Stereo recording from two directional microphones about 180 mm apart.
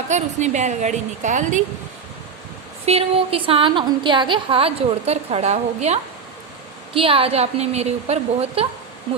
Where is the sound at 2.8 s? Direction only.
35° right (ahead or behind).